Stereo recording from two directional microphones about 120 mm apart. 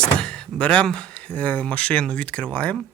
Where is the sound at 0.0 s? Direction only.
5° left (ahead or behind).